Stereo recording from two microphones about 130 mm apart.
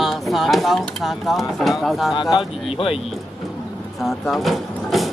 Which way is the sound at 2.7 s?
45° left (ahead or behind).